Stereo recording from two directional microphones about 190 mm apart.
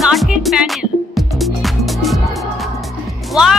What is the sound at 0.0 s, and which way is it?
Music, centre (ahead or behind).